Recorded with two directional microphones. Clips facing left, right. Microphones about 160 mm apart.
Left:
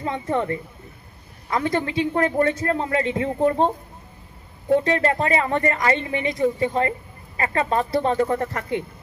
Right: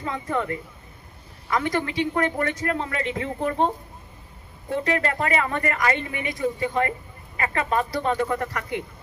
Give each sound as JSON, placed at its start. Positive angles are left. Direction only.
{"t": 0.0, "sound": "a man's voice", "side_deg": 30}
{"t": 4.8, "sound": "speech", "side_deg": 30}